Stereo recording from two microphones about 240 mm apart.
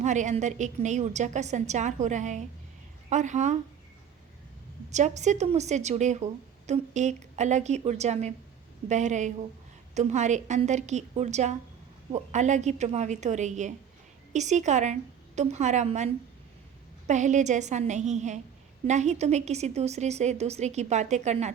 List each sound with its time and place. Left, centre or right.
0.0 s a woman's voice: right
4.9 s a woman's voice: right
17.1 s a woman's voice: right